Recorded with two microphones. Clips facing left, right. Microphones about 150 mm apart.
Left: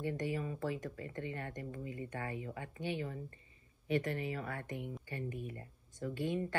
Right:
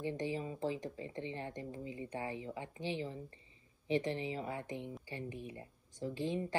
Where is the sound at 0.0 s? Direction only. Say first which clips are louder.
Even; 25° right (ahead or behind).